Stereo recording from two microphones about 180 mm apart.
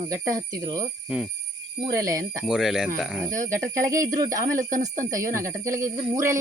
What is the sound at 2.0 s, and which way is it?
Speech, 20° right (ahead or behind).